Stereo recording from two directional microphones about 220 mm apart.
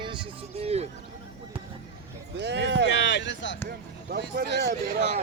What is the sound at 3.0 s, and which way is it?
Speech, 55° left (ahead or behind).